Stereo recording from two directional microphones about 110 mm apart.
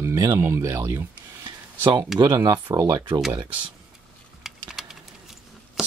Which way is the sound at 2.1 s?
35° right (ahead or behind).